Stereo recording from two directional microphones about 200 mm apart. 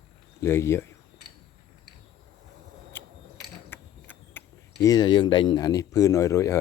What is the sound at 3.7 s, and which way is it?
Speech, 10° left (ahead or behind).